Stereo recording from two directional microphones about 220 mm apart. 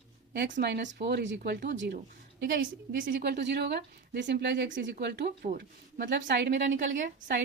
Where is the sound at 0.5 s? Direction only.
50° right (ahead or behind).